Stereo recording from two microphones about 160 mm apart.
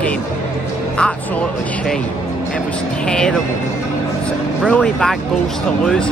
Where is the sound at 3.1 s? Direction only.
5° left (ahead or behind).